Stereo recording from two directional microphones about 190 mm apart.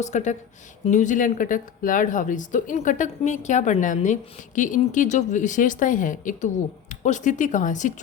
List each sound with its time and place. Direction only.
0.0 s speech: 40° left (ahead or behind)